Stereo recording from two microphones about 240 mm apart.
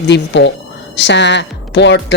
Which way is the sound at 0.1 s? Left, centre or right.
Left.